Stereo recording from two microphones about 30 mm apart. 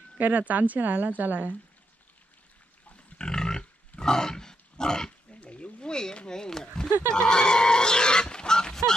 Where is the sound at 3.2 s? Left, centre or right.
Left.